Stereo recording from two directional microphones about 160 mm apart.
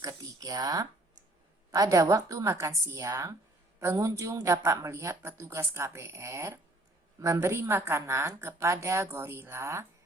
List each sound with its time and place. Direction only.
0.0 s a woman's voice: 20° right (ahead or behind)